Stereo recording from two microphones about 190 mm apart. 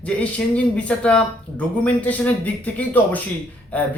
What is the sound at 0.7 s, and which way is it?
Speech, 5° left (ahead or behind).